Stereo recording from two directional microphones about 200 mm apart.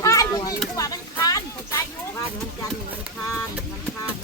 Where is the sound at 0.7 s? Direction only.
20° left (ahead or behind).